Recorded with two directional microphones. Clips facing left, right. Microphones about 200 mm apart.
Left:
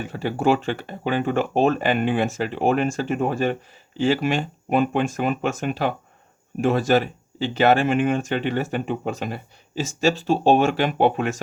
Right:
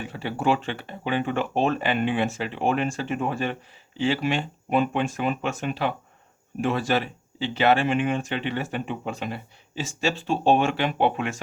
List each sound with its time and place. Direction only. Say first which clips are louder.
0.0 s speech: left 4 dB; 45° left (ahead or behind)